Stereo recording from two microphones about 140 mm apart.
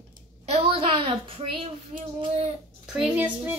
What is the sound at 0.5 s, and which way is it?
Speech, 40° right (ahead or behind).